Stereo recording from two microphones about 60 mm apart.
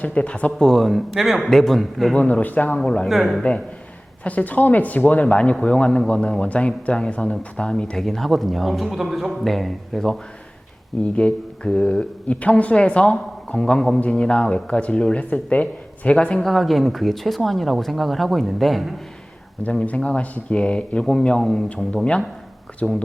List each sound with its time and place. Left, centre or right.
0.0 s speech: centre
0.6 s speech: centre
2.1 s speech: left
3.1 s speech: centre
4.2 s speech: left
8.0 s speech: centre
11.0 s speech: centre
16.5 s speech: centre
20.0 s speech: centre
22.8 s speech: centre